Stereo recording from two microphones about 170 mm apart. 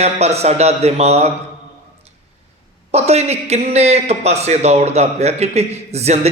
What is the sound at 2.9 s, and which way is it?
A man's voice, 40° right (ahead or behind).